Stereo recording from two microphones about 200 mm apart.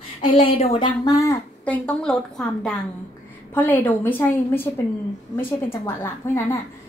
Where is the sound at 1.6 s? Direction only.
5° left (ahead or behind).